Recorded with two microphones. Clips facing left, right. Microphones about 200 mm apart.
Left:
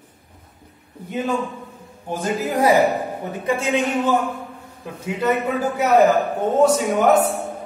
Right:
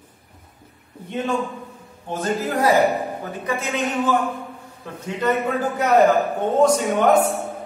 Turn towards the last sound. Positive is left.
turn(degrees=5)  # may be behind; listen again after turning